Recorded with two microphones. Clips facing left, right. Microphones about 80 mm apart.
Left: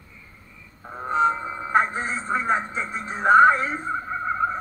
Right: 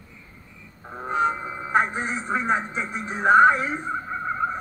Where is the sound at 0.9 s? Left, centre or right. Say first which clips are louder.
Left 2 dB; centre.